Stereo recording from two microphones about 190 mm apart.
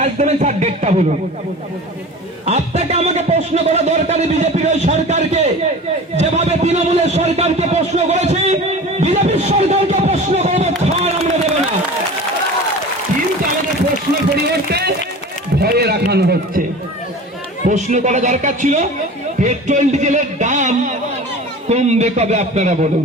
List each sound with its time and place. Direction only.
0.0 s a man's voice: 35° right (ahead or behind)
2.5 s speech: 35° right (ahead or behind)
6.1 s a sound: 35° right (ahead or behind)
14.7 s run: 55° right (ahead or behind)
15.6 s a sound: 55° right (ahead or behind)
17.7 s a man's voice: 40° right (ahead or behind)